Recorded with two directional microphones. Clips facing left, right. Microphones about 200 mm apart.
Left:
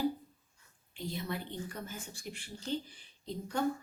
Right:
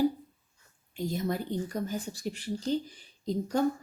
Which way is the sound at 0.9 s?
45° right (ahead or behind).